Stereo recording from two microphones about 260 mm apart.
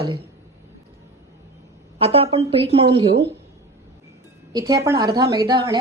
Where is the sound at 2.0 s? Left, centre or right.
Right.